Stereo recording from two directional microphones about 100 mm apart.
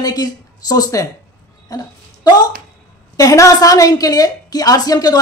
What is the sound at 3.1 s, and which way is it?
A woman's voice, 35° left (ahead or behind).